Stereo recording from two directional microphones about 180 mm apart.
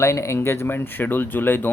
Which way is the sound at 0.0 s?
15° left (ahead or behind).